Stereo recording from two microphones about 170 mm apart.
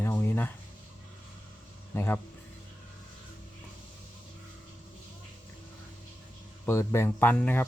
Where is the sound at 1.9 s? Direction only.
15° left (ahead or behind).